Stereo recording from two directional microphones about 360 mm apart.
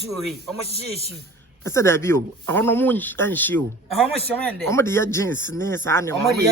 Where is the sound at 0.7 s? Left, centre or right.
Centre.